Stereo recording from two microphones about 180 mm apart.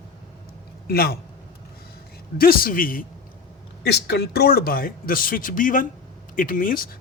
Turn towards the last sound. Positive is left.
turn(degrees=50)  # may be behind; listen again after turning